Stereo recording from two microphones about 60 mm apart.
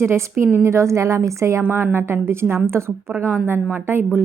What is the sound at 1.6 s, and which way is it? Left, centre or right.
A woman's voice, right.